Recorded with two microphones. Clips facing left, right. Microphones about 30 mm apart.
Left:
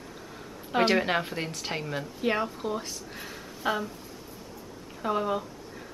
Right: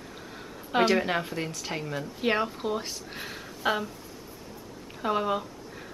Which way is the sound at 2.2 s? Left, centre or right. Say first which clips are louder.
Right 2 dB; right.